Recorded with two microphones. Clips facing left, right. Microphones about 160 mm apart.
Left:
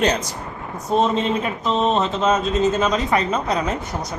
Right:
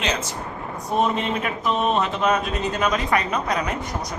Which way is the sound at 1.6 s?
25° left (ahead or behind).